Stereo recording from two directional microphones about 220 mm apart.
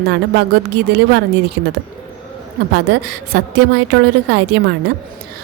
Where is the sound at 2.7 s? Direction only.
50° right (ahead or behind).